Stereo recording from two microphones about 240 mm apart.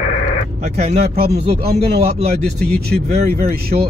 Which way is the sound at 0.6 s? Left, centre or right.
Right.